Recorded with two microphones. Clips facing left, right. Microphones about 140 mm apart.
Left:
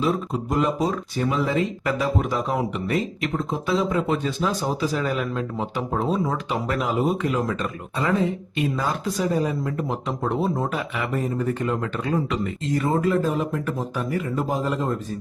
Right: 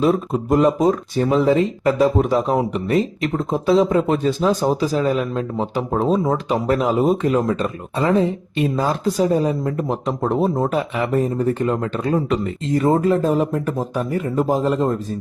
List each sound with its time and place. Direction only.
0.5 s speech: 45° right (ahead or behind)